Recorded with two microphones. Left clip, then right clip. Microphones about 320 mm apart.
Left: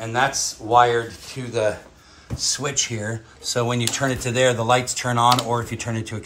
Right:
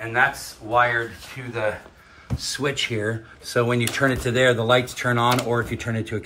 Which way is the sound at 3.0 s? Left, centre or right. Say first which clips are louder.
Right 1 dB; left.